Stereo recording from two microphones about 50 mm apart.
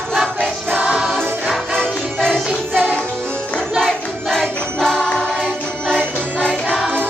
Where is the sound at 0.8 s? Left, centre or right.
Right.